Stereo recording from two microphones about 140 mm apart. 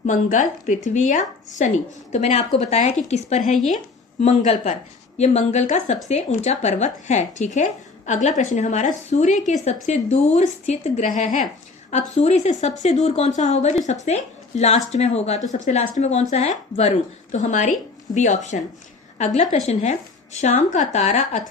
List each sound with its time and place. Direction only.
0.0 s a woman's voice: 65° left (ahead or behind)